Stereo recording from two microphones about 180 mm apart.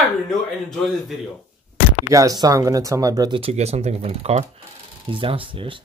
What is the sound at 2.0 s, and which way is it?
Speech, 20° right (ahead or behind).